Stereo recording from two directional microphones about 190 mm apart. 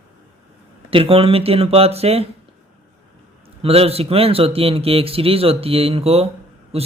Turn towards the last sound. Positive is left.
turn(degrees=-30)  # may be behind; listen again after turning